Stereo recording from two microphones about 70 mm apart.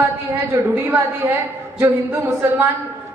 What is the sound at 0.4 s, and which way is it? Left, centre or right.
A woman's voice, right.